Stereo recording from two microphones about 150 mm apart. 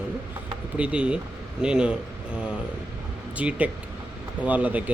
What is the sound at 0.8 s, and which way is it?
Speech, 10° right (ahead or behind).